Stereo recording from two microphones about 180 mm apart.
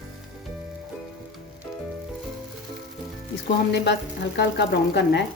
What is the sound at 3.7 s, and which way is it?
Speech, 70° left (ahead or behind).